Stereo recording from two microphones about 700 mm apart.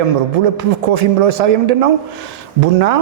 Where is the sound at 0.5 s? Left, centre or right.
Right.